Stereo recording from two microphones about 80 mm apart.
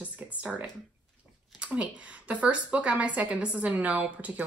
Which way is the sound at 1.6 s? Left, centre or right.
Centre.